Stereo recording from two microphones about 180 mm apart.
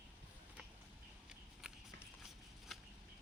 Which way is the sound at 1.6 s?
5° right (ahead or behind).